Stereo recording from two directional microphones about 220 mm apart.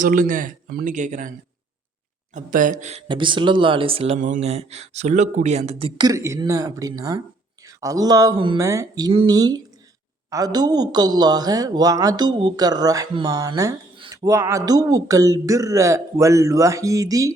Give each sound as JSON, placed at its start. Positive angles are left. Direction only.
{"t": 0.0, "sound": "speech", "side_deg": -40}
{"t": 2.3, "sound": "speech", "side_deg": -35}